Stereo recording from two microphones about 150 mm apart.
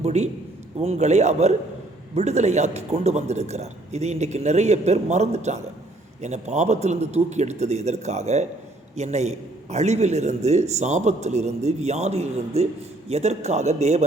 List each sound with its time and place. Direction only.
0.0 s a man's voice: 50° right (ahead or behind)